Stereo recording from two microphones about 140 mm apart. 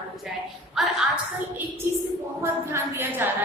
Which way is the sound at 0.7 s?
5° right (ahead or behind).